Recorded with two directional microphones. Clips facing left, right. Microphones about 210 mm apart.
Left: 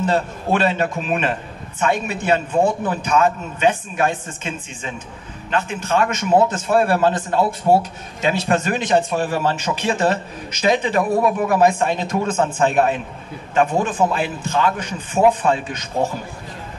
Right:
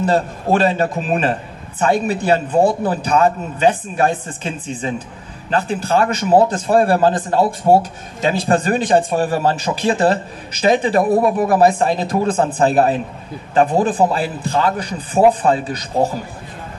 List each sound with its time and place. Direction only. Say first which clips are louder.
0.0 s a man's voice: right 3 dB; 35° right (ahead or behind)